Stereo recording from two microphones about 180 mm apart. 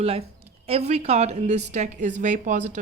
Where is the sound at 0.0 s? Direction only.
35° right (ahead or behind).